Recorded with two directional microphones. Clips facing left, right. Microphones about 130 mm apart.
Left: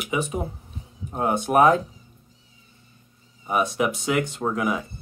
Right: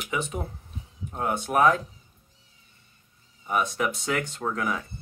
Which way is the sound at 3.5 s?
15° left (ahead or behind).